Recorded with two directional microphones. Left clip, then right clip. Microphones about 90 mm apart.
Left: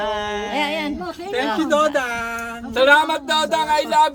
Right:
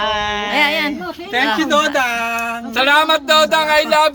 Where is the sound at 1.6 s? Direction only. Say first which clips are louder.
Right 3 dB; 45° left (ahead or behind).